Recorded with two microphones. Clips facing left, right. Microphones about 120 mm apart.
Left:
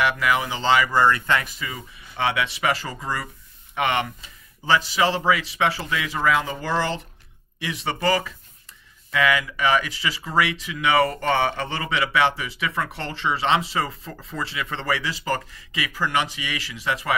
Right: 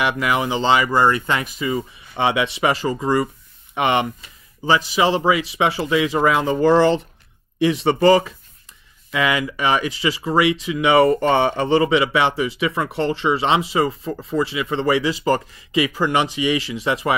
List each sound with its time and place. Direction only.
0.0 s speech: 25° right (ahead or behind)